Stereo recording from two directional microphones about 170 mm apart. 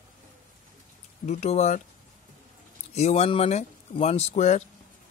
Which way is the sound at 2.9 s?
40° left (ahead or behind).